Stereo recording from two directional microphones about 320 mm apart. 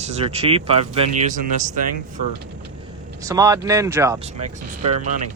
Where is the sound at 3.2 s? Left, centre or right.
Centre.